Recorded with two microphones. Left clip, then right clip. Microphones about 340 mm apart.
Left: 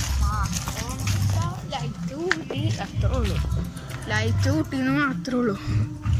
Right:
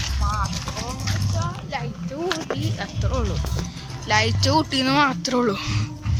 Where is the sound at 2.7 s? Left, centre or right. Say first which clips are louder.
Right 2 dB; centre.